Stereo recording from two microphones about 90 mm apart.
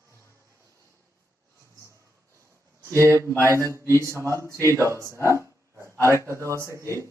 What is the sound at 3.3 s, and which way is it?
Mantra, 25° left (ahead or behind).